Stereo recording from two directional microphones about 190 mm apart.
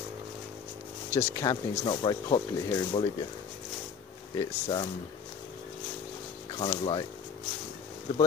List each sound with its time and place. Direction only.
1.1 s speech: 20° left (ahead or behind)
4.4 s speech: 20° left (ahead or behind)
6.6 s speech: 25° left (ahead or behind)